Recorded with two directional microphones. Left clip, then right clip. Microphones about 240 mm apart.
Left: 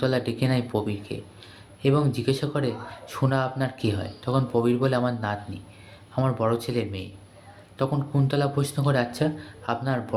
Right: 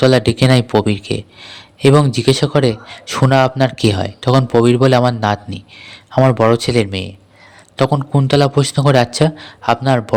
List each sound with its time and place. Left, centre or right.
0.0 s a man's voice: right